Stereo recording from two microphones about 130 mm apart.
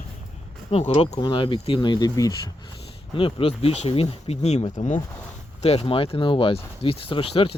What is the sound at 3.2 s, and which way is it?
Speech, 45° left (ahead or behind).